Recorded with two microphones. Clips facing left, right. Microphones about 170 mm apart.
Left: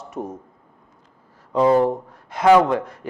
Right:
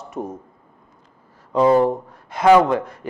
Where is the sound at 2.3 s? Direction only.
15° right (ahead or behind).